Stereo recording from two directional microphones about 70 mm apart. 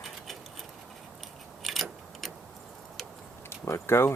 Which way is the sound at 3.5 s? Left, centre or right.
Left.